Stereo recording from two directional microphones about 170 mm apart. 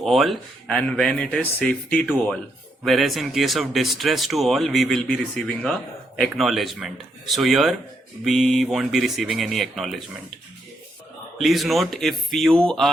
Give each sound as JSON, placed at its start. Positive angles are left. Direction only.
{"t": 0.0, "sound": "speech", "side_deg": 0}
{"t": 11.3, "sound": "speech", "side_deg": 0}